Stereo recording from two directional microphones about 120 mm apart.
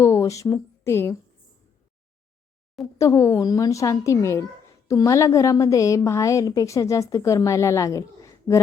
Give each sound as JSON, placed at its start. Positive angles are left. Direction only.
{"t": 0.0, "sound": "speech", "side_deg": 25}
{"t": 3.0, "sound": "a woman's voice", "side_deg": 25}